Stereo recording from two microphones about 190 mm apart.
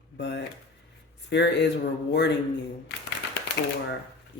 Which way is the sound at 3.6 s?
65° left (ahead or behind).